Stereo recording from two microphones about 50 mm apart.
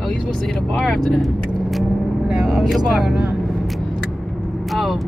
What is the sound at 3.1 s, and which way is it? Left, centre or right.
Speech, centre.